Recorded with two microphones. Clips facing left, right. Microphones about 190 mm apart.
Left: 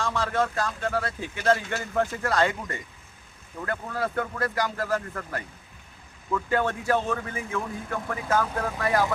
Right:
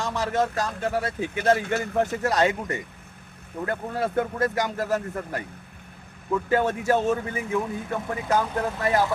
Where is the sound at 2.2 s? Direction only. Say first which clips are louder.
Right 2 dB; 20° right (ahead or behind).